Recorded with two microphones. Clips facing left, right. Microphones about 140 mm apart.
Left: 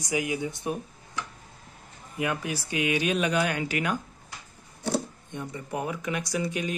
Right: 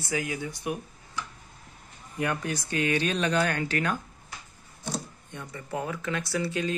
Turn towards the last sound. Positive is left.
turn(degrees=15)  # may be behind; listen again after turning